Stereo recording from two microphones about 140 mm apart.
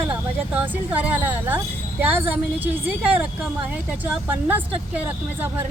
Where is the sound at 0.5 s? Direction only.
10° right (ahead or behind).